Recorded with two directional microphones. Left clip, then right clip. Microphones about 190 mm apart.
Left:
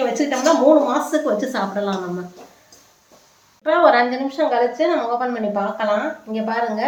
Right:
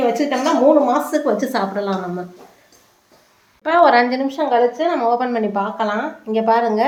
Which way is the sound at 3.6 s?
40° right (ahead or behind).